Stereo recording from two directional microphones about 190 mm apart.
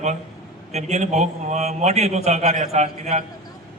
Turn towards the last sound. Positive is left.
turn(degrees=-35)  # may be behind; listen again after turning